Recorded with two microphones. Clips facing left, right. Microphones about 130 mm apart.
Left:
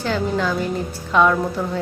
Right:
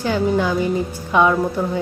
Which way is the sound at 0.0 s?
10° right (ahead or behind).